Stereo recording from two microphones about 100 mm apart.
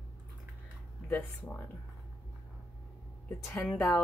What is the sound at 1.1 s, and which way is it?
Speech, 20° left (ahead or behind).